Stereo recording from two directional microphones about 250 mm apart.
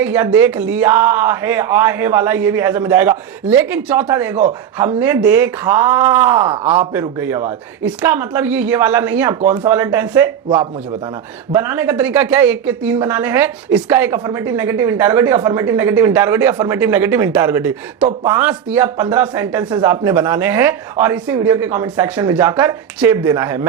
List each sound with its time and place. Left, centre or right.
0.0 s speech: centre
6.9 s speech: centre
11.5 s speech: centre
18.0 s speech: right
18.3 s speech: centre